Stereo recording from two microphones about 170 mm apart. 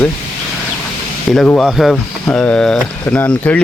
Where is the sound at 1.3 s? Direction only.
Centre (ahead or behind).